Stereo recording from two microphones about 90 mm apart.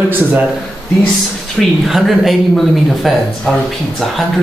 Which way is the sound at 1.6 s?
Centre (ahead or behind).